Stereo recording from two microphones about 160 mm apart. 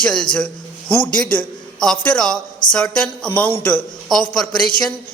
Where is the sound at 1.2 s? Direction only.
5° left (ahead or behind).